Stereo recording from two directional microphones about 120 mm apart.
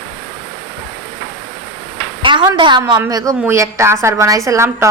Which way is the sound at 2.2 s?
40° right (ahead or behind).